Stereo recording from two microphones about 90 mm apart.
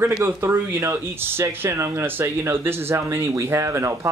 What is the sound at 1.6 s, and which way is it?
Speech, 30° right (ahead or behind).